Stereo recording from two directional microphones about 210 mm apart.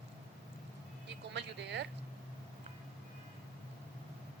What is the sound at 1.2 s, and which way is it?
Speech, 55° right (ahead or behind).